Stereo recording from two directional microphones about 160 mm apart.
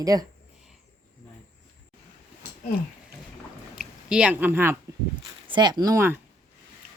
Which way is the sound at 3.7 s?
5° right (ahead or behind).